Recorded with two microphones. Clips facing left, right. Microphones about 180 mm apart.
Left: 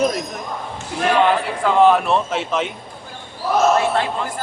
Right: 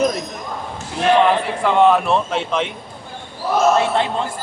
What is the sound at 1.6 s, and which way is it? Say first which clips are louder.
Speech: even; centre (ahead or behind).